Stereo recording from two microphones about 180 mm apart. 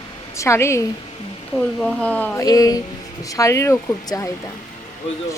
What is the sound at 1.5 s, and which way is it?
Speech, centre (ahead or behind).